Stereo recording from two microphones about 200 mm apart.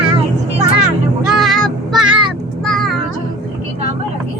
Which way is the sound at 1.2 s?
Centre (ahead or behind).